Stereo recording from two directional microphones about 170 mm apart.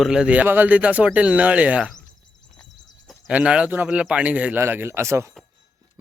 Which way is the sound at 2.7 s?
25° left (ahead or behind).